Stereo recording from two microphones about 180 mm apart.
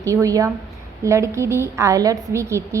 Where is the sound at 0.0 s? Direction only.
15° right (ahead or behind).